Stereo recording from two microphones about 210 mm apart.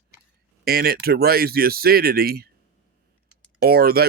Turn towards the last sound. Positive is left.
turn(degrees=-45)  # may be behind; listen again after turning